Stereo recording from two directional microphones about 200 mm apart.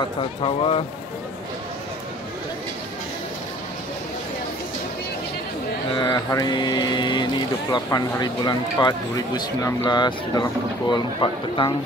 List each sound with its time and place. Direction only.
0.0 s speech: 25° left (ahead or behind)
5.9 s speech: 20° left (ahead or behind)